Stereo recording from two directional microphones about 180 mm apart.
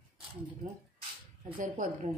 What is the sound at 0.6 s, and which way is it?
A woman's voice, 50° right (ahead or behind).